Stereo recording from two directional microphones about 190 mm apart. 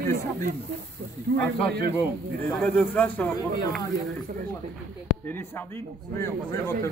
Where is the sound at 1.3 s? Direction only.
60° right (ahead or behind).